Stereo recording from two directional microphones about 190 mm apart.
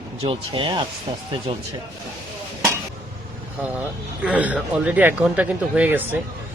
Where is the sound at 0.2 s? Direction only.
25° right (ahead or behind).